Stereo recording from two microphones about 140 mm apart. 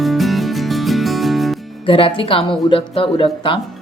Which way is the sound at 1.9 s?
40° left (ahead or behind).